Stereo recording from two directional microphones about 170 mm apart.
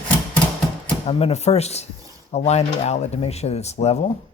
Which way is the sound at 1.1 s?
35° left (ahead or behind).